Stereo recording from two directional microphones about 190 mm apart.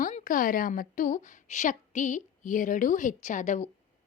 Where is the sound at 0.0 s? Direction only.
45° left (ahead or behind).